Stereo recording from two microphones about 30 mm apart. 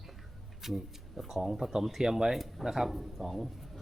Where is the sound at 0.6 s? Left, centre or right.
Centre.